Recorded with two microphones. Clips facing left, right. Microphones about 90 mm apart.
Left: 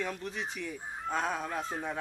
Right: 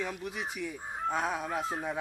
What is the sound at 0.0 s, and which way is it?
Speech, 10° right (ahead or behind).